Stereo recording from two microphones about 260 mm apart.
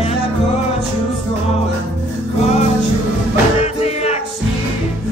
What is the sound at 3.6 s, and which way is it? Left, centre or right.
Music, left.